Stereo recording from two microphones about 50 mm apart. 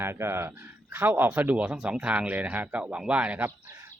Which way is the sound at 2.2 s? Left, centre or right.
Right.